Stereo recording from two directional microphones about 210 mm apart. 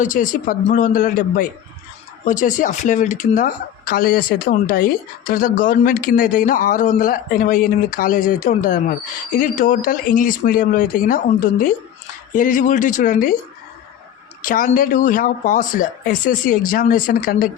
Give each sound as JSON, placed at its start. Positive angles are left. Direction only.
{"t": 0.0, "sound": "speech", "side_deg": 40}
{"t": 14.4, "sound": "speech", "side_deg": 40}